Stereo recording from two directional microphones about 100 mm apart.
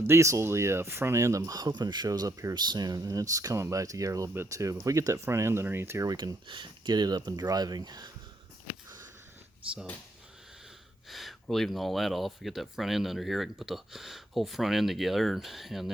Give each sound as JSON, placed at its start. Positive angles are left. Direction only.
{"t": 0.1, "sound": "speech", "side_deg": -30}
{"t": 6.1, "sound": "speech", "side_deg": -45}
{"t": 11.1, "sound": "speech", "side_deg": 0}